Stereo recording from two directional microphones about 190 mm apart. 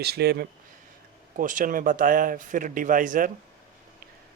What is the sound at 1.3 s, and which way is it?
Speech, 45° right (ahead or behind).